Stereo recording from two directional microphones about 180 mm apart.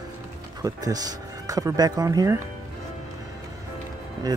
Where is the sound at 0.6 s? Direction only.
20° right (ahead or behind).